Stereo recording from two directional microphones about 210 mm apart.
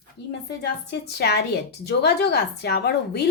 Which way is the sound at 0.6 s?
50° left (ahead or behind).